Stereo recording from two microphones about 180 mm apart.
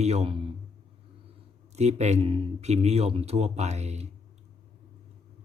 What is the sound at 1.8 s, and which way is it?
Speech, 40° right (ahead or behind).